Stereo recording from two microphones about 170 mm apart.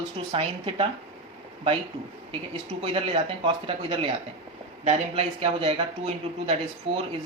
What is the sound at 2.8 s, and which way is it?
Speech, 35° right (ahead or behind).